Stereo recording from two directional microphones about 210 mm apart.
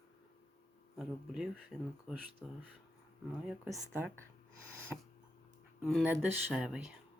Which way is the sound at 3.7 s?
10° right (ahead or behind).